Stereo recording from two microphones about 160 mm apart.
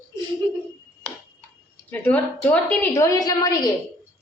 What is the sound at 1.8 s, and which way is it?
A woman's voice, 10° left (ahead or behind).